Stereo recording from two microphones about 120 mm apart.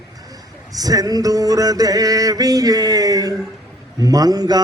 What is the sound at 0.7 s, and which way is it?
Mantra, 30° right (ahead or behind).